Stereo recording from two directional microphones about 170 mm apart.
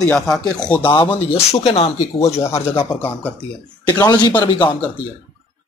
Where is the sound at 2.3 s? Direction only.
15° left (ahead or behind).